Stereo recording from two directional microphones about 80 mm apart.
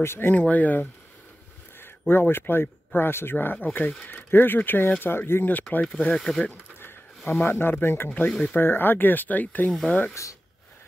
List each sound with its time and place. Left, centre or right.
0.0 s speech: left
0.3 s speech: centre
6.4 s a sound: left
7.4 s speech: left